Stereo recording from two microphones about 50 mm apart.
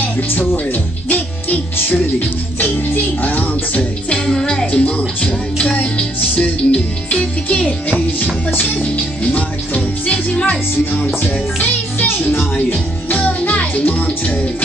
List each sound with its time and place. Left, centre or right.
1.0 s speech: left
4.3 s music: centre
4.7 s music: left
8.9 s music: left
11.2 s music: left